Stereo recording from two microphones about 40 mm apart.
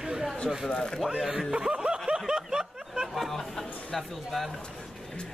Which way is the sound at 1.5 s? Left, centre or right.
Right.